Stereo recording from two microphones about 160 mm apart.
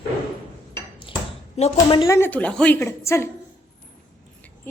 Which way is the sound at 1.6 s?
40° left (ahead or behind).